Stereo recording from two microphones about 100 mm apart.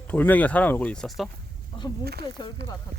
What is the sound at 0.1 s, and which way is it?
Speech, 15° left (ahead or behind).